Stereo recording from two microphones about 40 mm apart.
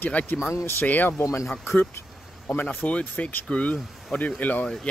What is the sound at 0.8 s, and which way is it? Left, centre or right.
Speech, left.